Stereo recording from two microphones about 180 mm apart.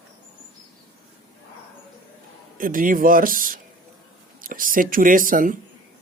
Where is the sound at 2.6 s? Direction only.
50° right (ahead or behind).